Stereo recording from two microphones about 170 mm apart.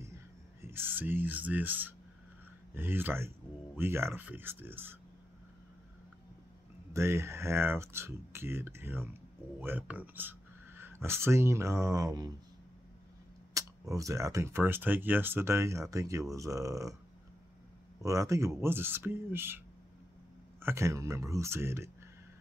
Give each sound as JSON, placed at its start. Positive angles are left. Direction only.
{"t": 0.6, "sound": "speech", "side_deg": -15}
{"t": 6.9, "sound": "speech", "side_deg": -15}
{"t": 13.5, "sound": "speech", "side_deg": -20}
{"t": 18.0, "sound": "speech", "side_deg": -20}
{"t": 20.6, "sound": "speech", "side_deg": -15}